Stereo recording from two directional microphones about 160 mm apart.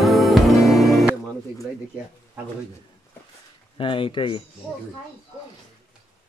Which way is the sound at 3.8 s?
30° left (ahead or behind).